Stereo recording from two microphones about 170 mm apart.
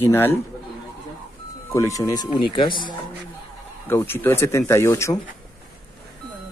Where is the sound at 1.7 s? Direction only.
20° left (ahead or behind).